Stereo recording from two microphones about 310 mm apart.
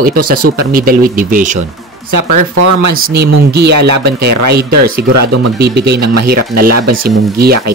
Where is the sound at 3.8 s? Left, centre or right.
Right.